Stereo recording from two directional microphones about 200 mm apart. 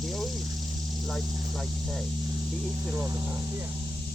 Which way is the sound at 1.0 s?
Centre (ahead or behind).